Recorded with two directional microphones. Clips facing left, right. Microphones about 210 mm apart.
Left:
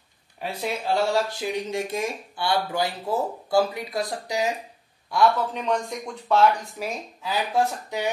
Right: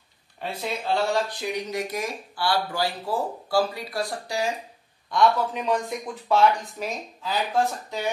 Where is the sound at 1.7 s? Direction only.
25° left (ahead or behind).